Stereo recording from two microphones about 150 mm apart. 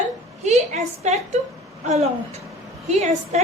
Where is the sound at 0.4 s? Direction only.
45° right (ahead or behind).